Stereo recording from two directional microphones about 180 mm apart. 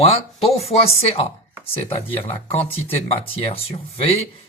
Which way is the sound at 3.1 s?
30° left (ahead or behind).